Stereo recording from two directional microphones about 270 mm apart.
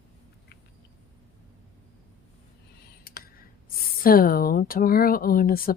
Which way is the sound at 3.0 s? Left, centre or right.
Left.